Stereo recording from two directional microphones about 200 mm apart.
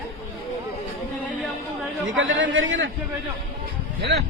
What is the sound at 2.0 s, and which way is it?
Speech, 65° right (ahead or behind).